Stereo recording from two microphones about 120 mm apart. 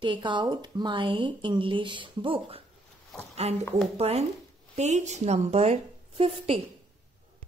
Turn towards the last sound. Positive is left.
turn(degrees=-60)  # may be behind; listen again after turning